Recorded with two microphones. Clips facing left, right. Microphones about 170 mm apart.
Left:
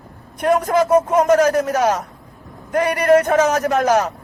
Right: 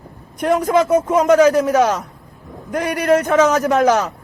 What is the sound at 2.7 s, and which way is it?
Speech, 55° left (ahead or behind).